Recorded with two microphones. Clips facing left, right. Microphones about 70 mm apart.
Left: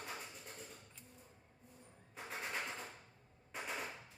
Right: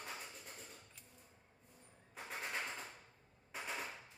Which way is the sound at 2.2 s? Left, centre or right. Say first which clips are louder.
Even; centre.